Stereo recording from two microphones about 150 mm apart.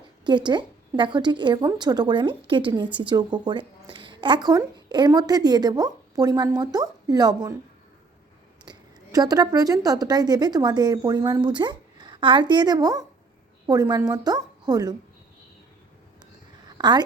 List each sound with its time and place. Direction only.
0.3 s a woman's voice: 30° right (ahead or behind)
8.6 s a woman's voice: 30° right (ahead or behind)
16.7 s a sound: 30° right (ahead or behind)